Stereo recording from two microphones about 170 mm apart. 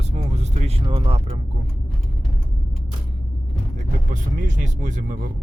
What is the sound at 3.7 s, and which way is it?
Speech, 45° right (ahead or behind).